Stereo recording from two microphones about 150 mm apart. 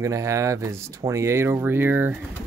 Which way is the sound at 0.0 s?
20° right (ahead or behind).